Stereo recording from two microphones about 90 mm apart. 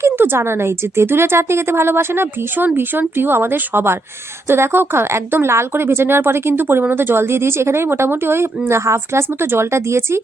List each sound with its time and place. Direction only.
0.0 s speech: 25° right (ahead or behind)